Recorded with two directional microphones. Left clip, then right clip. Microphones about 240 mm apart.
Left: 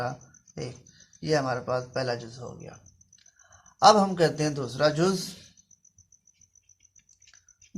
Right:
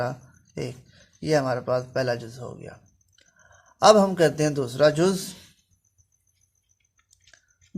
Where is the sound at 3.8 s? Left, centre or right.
Right.